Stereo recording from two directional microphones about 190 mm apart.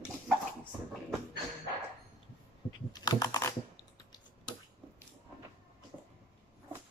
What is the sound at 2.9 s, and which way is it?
Computer keyboard, 20° left (ahead or behind).